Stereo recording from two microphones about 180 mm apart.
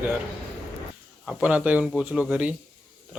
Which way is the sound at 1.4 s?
10° right (ahead or behind).